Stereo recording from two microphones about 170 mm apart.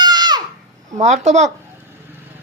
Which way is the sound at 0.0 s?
25° right (ahead or behind).